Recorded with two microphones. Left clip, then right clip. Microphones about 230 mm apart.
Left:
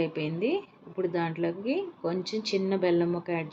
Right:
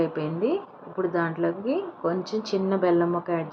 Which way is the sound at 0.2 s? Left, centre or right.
Right.